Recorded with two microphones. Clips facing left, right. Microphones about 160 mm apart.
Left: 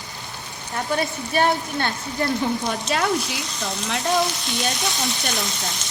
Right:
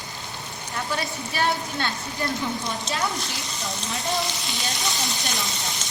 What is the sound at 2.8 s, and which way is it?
Speech, 75° left (ahead or behind).